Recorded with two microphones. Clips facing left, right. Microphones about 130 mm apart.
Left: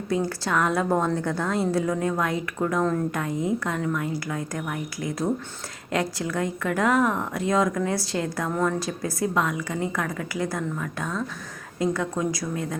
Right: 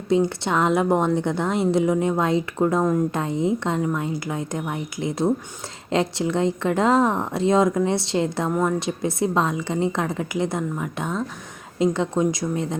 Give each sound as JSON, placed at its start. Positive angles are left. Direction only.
{"t": 0.1, "sound": "speech", "side_deg": -25}